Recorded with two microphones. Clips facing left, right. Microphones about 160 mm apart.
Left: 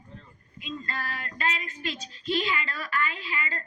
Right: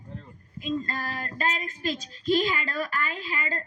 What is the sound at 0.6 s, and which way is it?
A woman's voice, 40° right (ahead or behind).